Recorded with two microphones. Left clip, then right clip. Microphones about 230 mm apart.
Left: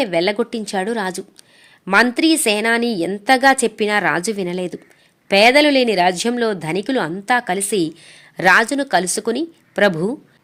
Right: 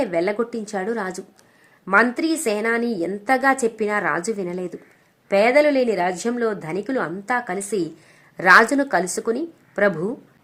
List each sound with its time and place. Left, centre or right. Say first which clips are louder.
0.0 s a woman's voice: left 4 dB; left
9.9 s speech: left 4 dB; left